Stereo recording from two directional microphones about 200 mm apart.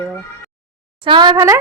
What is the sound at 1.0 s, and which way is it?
Speech, 25° right (ahead or behind).